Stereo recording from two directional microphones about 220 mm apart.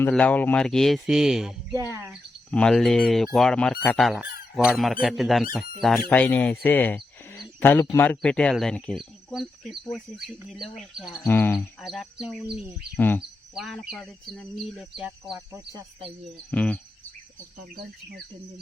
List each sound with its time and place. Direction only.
0.0 s speech: 5° left (ahead or behind); by 2.1 s 10° right (ahead or behind)
2.5 s speech: 5° left (ahead or behind)
11.2 s cricket: 10° left (ahead or behind)
13.5 s speech: centre (ahead or behind)
15.4 s speech: 15° right (ahead or behind)
16.5 s cricket: 5° left (ahead or behind)